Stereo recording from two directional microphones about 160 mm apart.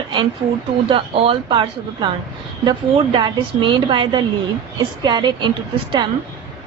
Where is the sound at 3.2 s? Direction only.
30° right (ahead or behind).